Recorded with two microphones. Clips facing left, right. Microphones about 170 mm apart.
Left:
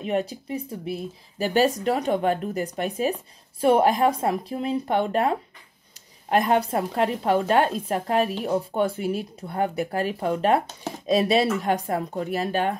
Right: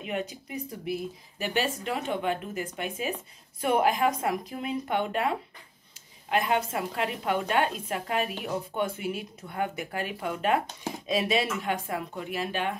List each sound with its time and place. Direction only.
0.0 s a woman's voice: 35° left (ahead or behind)
1.5 s a woman's voice: 40° left (ahead or behind)